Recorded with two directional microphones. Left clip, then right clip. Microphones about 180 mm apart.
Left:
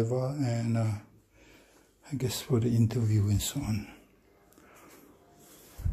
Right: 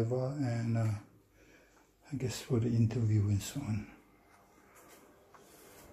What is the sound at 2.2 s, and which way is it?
Speech, 15° left (ahead or behind).